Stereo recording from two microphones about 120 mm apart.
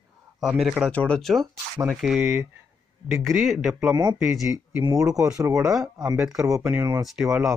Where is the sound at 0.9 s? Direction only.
10° left (ahead or behind); by 2.5 s 10° right (ahead or behind).